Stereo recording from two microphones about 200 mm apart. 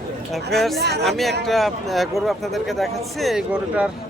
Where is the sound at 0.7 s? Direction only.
55° right (ahead or behind).